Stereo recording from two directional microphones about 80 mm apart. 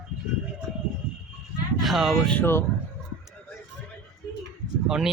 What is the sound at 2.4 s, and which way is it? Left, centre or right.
Speech, left.